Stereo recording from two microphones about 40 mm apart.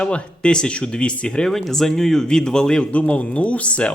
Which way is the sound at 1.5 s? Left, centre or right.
Centre.